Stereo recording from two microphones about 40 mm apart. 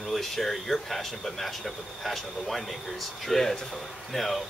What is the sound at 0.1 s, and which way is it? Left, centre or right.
Speech, centre.